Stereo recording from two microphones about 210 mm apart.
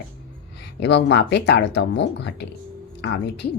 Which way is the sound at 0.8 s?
55° left (ahead or behind).